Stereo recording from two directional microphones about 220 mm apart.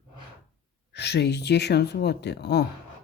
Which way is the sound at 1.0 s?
50° left (ahead or behind).